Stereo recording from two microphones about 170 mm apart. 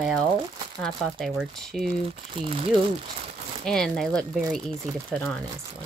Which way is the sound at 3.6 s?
5° left (ahead or behind).